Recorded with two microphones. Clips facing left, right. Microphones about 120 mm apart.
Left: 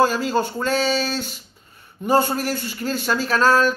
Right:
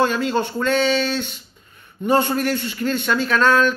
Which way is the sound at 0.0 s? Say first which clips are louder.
Even; 40° left (ahead or behind).